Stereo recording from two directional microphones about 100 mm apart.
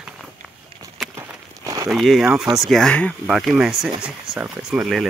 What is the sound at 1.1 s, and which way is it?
Walk, 35° right (ahead or behind).